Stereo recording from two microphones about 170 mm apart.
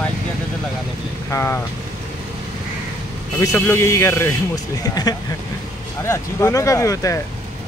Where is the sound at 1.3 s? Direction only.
15° left (ahead or behind).